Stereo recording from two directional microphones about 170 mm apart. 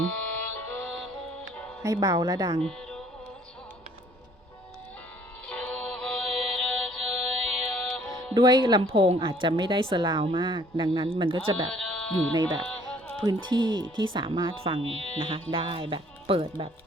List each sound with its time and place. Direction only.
0.1 s music: 10° left (ahead or behind)
1.8 s speech: 20° right (ahead or behind)
2.6 s music: 5° left (ahead or behind)
5.5 s music: 5° left (ahead or behind)
8.3 s speech: 25° right (ahead or behind)
11.7 s sheep: 5° left (ahead or behind)
12.3 s speech: 25° right (ahead or behind)